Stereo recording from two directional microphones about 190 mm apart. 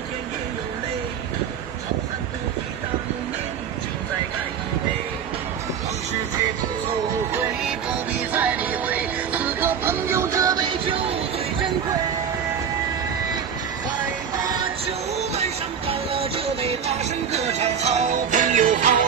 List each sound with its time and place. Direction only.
8.3 s music: 10° right (ahead or behind); by 11.1 s 25° right (ahead or behind)
14.3 s music: 20° right (ahead or behind)
14.9 s music: 35° right (ahead or behind)